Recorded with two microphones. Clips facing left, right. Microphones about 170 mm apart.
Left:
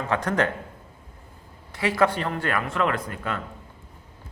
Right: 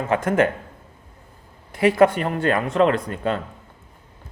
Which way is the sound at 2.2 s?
25° right (ahead or behind).